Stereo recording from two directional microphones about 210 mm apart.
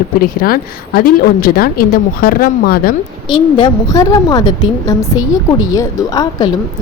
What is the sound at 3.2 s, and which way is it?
A woman's voice, 20° left (ahead or behind).